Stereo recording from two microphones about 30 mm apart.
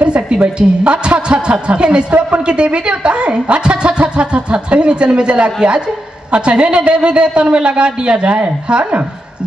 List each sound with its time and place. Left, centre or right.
0.0 s a woman's voice: right